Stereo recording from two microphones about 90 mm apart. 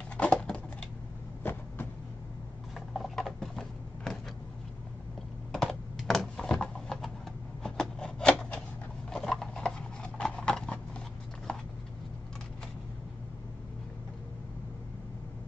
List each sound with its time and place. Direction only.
0.2 s a sound: 15° left (ahead or behind)
1.4 s vehicle: 25° left (ahead or behind)
2.9 s a sound: 5° left (ahead or behind)
5.5 s computer keyboard: 5° left (ahead or behind)
7.6 s rub: 5° left (ahead or behind)
9.1 s horse: 5° left (ahead or behind)